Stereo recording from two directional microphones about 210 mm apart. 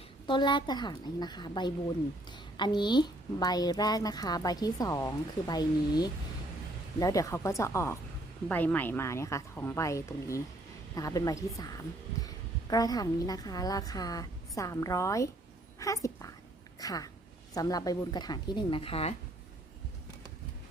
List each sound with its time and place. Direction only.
0.3 s a woman's voice: 20° left (ahead or behind)